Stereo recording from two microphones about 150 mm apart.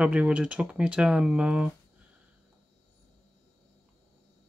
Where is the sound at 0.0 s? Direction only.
10° right (ahead or behind).